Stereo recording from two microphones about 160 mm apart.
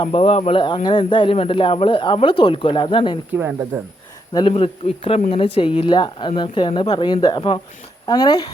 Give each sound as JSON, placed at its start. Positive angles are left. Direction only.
{"t": 0.0, "sound": "speech", "side_deg": 35}
{"t": 3.7, "sound": "speech", "side_deg": -20}
{"t": 4.4, "sound": "speech", "side_deg": 35}